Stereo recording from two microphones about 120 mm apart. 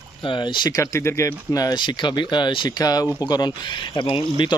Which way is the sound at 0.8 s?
25° left (ahead or behind).